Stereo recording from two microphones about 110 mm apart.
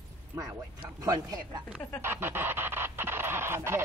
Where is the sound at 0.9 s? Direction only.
35° right (ahead or behind).